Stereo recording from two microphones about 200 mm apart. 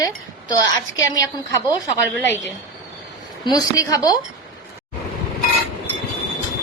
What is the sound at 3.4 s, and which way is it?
Speech, 20° left (ahead or behind).